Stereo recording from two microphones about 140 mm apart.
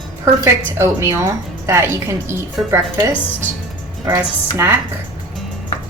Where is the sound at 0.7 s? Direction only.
20° right (ahead or behind).